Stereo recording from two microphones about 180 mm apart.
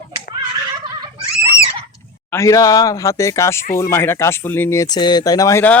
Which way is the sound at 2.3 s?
20° left (ahead or behind).